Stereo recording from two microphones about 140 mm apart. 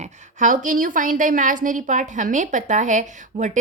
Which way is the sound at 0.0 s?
65° right (ahead or behind).